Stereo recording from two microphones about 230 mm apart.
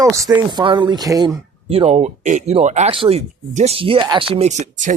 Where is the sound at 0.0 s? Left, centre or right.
Centre.